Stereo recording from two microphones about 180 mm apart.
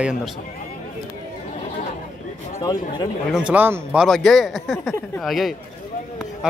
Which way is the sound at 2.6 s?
20° left (ahead or behind).